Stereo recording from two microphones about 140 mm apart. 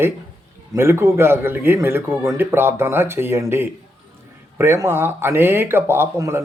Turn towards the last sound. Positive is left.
turn(degrees=-20)  # may be behind; listen again after turning